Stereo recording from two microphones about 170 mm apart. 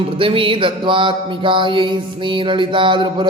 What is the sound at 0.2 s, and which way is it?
Music, 30° right (ahead or behind).